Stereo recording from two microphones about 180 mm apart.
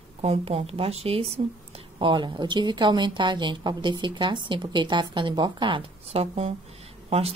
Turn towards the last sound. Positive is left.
turn(degrees=-35)  # may be behind; listen again after turning